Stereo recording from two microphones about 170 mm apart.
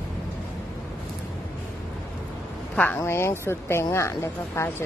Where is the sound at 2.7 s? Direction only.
10° left (ahead or behind).